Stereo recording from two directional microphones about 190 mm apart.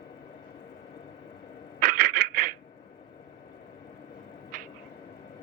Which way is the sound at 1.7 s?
50° right (ahead or behind).